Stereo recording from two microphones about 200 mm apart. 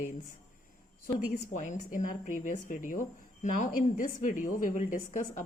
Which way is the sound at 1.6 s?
40° left (ahead or behind).